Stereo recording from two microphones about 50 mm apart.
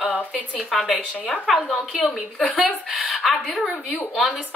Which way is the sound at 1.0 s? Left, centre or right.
Left.